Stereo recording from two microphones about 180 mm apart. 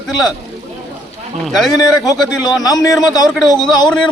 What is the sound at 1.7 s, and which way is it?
A man's voice, 20° left (ahead or behind).